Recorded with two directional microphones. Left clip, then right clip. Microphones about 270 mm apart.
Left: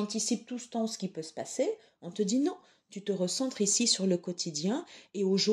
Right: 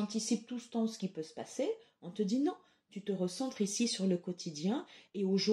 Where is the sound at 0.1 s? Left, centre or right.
Left.